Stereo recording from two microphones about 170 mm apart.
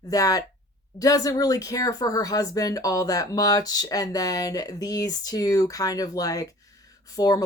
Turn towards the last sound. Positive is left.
turn(degrees=20)  # may be behind; listen again after turning